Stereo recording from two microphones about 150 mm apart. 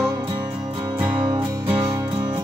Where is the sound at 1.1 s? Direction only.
30° right (ahead or behind).